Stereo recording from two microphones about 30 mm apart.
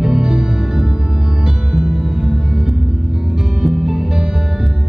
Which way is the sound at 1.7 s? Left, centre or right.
Right.